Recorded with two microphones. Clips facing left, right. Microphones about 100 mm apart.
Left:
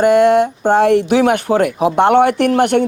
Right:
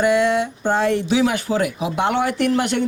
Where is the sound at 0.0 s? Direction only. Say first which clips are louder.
Left 7 dB; 50° left (ahead or behind).